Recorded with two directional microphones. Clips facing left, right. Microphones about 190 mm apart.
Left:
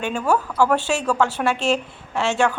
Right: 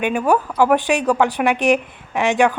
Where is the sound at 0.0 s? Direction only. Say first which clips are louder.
Right 4 dB; 15° right (ahead or behind).